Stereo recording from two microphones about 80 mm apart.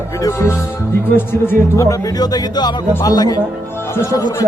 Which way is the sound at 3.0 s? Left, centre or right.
Left.